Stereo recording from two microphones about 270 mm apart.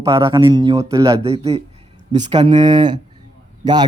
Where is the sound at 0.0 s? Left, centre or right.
Centre.